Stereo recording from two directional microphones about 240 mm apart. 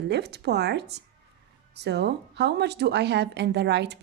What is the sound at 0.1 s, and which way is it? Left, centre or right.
Speech, right.